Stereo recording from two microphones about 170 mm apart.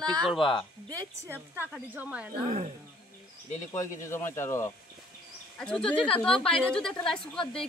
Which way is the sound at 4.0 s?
15° left (ahead or behind).